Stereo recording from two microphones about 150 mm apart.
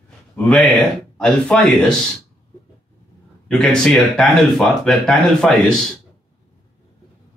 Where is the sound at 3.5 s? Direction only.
5° left (ahead or behind).